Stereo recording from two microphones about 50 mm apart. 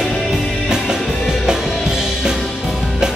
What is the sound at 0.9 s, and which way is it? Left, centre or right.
Music, centre.